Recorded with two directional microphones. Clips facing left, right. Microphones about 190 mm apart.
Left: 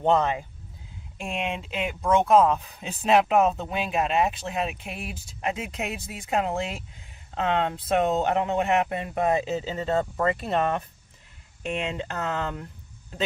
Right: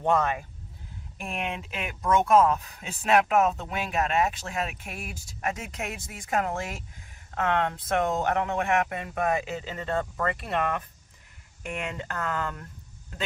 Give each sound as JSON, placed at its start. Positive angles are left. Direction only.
{"t": 0.0, "sound": "speech", "side_deg": 20}